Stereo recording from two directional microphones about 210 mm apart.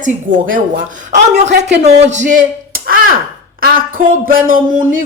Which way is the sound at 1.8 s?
30° right (ahead or behind).